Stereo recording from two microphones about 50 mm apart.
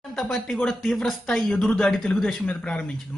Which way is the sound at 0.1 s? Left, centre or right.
Centre.